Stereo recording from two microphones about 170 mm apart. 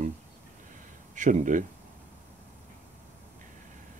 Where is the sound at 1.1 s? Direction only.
45° right (ahead or behind).